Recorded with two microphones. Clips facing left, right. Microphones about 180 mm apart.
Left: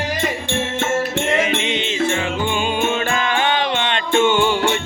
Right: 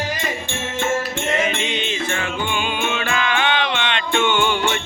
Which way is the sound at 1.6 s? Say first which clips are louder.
Left 4 dB; 20° left (ahead or behind).